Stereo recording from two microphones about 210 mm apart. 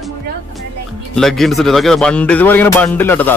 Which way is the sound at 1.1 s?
Centre (ahead or behind).